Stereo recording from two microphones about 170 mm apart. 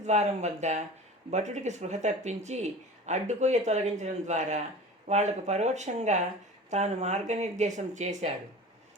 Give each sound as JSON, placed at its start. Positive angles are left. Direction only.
{"t": 0.0, "sound": "speech", "side_deg": -45}